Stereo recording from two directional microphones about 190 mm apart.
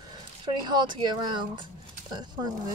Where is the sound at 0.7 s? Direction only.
20° right (ahead or behind).